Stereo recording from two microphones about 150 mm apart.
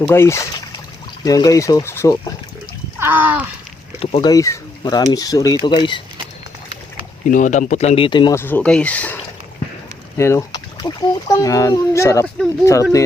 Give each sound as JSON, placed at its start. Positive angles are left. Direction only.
{"t": 0.1, "sound": "speech", "side_deg": 20}
{"t": 3.0, "sound": "speech", "side_deg": -10}
{"t": 4.0, "sound": "speech", "side_deg": 40}
{"t": 4.3, "sound": "speech", "side_deg": 25}
{"t": 7.3, "sound": "speech", "side_deg": 60}
{"t": 8.3, "sound": "speech", "side_deg": 15}
{"t": 10.2, "sound": "speech", "side_deg": 20}